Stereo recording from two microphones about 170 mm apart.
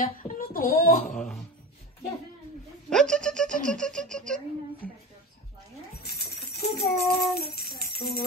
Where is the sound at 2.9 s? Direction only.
5° left (ahead or behind).